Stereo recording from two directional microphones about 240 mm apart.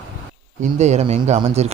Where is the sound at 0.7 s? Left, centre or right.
Right.